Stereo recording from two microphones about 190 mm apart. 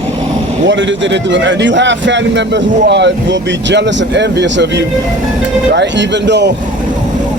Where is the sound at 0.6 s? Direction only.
75° right (ahead or behind).